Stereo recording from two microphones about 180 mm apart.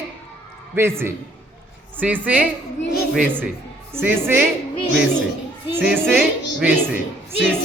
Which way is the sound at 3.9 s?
10° right (ahead or behind).